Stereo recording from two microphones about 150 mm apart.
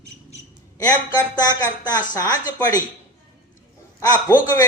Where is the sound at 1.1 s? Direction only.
25° left (ahead or behind).